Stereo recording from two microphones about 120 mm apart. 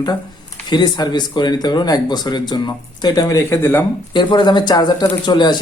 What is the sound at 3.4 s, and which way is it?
Speech, 20° left (ahead or behind).